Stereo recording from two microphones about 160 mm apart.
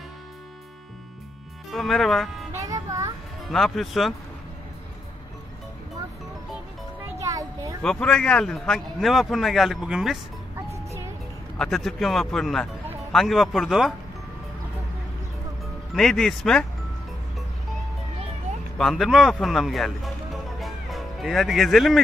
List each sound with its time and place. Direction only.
1.7 s a man's voice: centre (ahead or behind)
2.5 s music: 20° right (ahead or behind)
3.4 s a man's voice: centre (ahead or behind)
7.2 s a sound: 20° right (ahead or behind)
7.8 s a man's voice: 5° left (ahead or behind)
11.5 s a man's voice: centre (ahead or behind)
15.9 s a man's voice: 5° left (ahead or behind)
18.8 s a man's voice: centre (ahead or behind)
20.6 s music: centre (ahead or behind)